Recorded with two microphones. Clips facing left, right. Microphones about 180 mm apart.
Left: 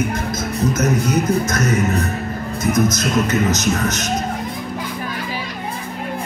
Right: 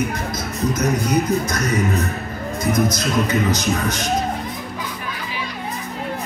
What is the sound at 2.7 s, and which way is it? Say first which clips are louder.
Speech: left 2 dB; 45° left (ahead or behind).